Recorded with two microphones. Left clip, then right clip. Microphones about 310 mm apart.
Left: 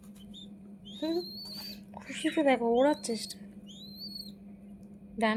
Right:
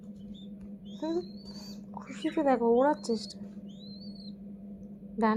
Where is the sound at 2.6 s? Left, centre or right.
Left.